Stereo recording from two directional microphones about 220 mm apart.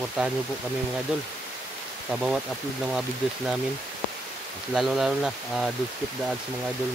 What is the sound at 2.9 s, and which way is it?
Speech, centre (ahead or behind).